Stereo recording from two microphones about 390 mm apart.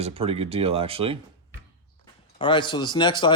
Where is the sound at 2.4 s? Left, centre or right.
Centre.